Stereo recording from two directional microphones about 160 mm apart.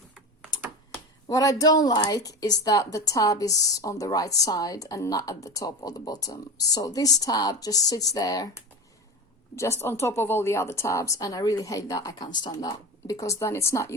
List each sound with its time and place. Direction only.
1.3 s a woman's voice: 20° left (ahead or behind)